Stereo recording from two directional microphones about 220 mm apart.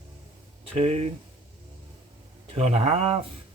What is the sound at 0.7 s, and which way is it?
Speech, 30° right (ahead or behind).